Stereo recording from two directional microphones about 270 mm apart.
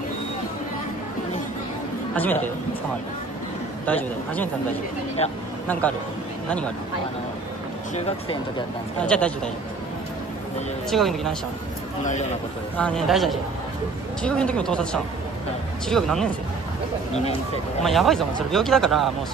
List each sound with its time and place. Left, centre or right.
2.1 s speech: centre
3.8 s speech: centre
5.7 s speech: centre
7.9 s speech: left
9.0 s speech: centre
10.9 s speech: centre
12.0 s speech: left
12.7 s speech: centre
17.1 s speech: left
17.8 s speech: centre